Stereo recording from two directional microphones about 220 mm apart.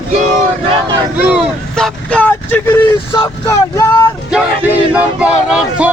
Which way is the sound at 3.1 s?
15° left (ahead or behind).